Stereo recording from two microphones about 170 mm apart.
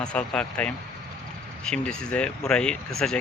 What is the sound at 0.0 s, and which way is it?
Speech, 5° left (ahead or behind).